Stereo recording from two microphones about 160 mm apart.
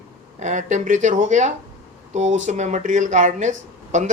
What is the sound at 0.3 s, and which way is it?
Speech, 50° right (ahead or behind).